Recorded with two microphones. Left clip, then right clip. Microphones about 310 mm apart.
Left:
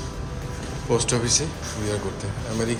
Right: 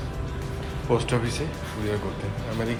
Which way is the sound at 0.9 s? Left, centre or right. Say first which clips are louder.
Left 3 dB; centre.